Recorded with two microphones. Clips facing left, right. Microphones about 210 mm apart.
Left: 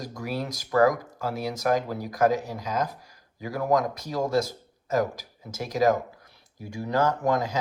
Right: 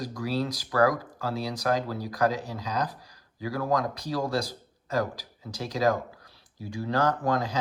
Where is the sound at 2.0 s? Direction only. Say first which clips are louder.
Left 4 dB; 20° left (ahead or behind).